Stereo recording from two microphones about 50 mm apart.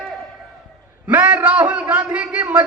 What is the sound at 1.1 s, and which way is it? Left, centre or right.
A man's voice, right.